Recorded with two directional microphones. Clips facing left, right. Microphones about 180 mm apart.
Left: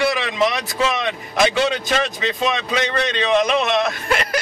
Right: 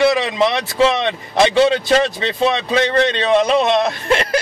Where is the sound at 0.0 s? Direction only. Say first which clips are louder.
Right 4 dB; 25° right (ahead or behind).